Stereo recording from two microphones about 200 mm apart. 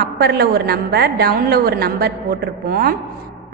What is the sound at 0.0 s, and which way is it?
A woman's voice, 55° right (ahead or behind).